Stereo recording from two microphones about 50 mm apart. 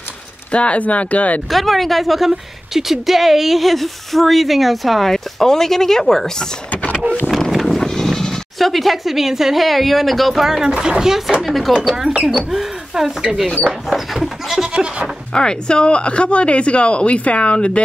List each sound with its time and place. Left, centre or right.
0.5 s speech: left
1.5 s a woman's voice: centre
6.7 s power windows: left
7.2 s speech: centre
10.7 s a woman's voice: centre
11.8 s speech: centre
13.8 s goat: centre
14.7 s goat: right
15.3 s speech: centre